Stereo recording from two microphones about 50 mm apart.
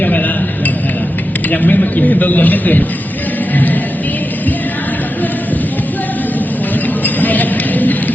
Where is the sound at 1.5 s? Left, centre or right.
Left.